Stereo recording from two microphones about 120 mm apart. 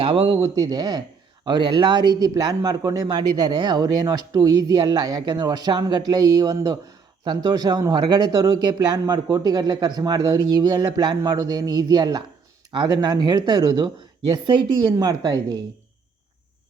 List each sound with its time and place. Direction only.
0.0 s speech: 50° right (ahead or behind)
0.4 s speech: 30° right (ahead or behind)
14.9 s speech: 30° right (ahead or behind)